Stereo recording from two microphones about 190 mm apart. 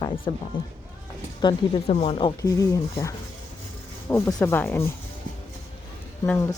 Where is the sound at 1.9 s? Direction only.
30° left (ahead or behind); by 4.9 s 10° left (ahead or behind).